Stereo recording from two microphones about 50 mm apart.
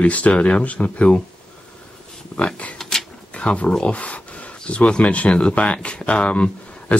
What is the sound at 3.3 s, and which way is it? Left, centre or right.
Speech, left.